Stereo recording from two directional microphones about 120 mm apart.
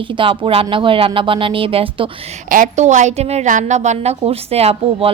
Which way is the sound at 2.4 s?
90° right.